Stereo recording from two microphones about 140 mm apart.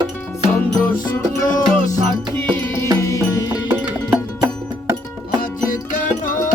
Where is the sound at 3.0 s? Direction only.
20° left (ahead or behind).